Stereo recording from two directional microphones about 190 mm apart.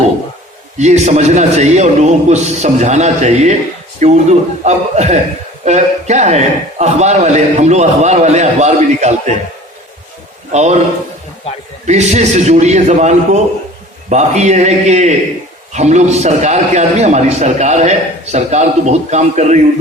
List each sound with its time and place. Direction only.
0.8 s a man's voice: 35° right (ahead or behind)
10.5 s a man's voice: 35° right (ahead or behind)
11.9 s a man's voice: 35° right (ahead or behind)